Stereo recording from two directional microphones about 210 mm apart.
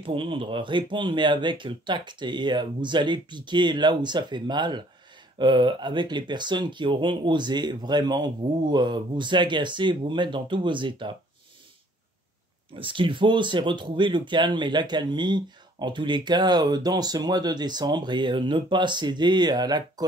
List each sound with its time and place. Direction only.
0.0 s speech: 25° right (ahead or behind)
12.7 s speech: 25° right (ahead or behind)